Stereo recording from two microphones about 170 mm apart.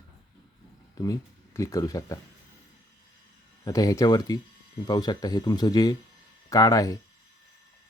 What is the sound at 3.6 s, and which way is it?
Speech, 20° left (ahead or behind).